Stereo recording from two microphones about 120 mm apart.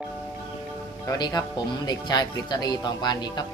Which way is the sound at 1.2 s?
35° left (ahead or behind).